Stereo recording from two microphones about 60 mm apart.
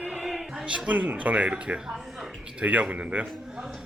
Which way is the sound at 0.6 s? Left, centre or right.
Centre.